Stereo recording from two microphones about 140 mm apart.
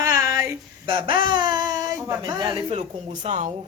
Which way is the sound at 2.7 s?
55° right (ahead or behind).